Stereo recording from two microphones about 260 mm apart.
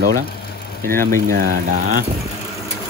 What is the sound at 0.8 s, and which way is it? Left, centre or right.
Speech, centre.